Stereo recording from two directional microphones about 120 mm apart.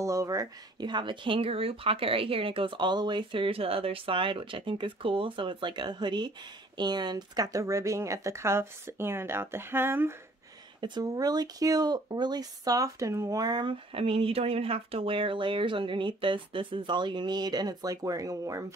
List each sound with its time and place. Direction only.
0.0 s speech: 25° right (ahead or behind)
10.8 s speech: 30° right (ahead or behind)
13.9 s speech: 55° right (ahead or behind); by 18.7 s 30° right (ahead or behind)